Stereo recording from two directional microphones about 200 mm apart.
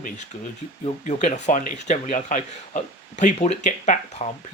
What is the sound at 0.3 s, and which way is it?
Speech, 35° left (ahead or behind).